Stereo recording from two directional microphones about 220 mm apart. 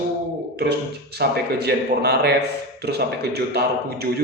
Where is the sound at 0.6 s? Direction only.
45° right (ahead or behind).